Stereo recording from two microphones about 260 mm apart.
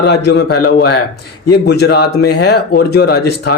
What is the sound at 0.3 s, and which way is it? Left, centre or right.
Speech, left.